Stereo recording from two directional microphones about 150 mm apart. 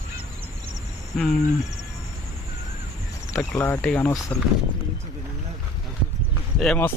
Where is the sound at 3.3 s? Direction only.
15° left (ahead or behind).